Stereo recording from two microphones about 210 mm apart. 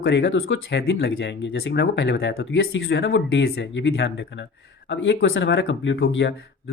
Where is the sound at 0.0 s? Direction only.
55° left (ahead or behind).